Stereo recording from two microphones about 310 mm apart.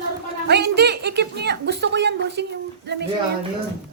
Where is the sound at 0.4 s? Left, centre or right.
Right.